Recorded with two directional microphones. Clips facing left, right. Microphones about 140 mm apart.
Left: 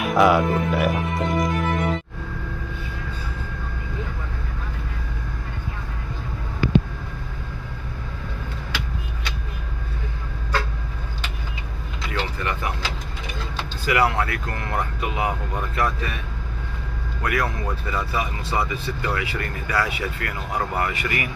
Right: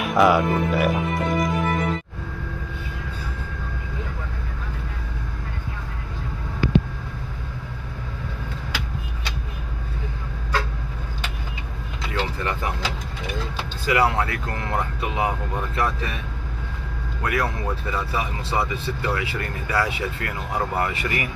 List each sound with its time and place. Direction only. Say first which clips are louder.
0.0 s speech: even; centre (ahead or behind)
12.1 s vehicle: right 1 dB; 30° right (ahead or behind)
13.8 s speech: even; 25° right (ahead or behind)
17.2 s a man's voice: even; 25° right (ahead or behind)